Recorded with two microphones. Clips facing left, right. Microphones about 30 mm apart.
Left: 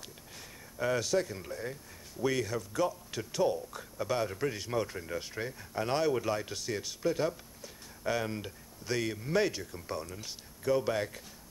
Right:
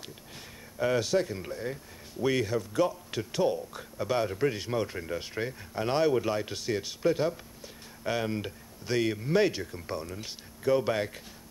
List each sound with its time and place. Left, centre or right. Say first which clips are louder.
0.7 s speech: right 3 dB; right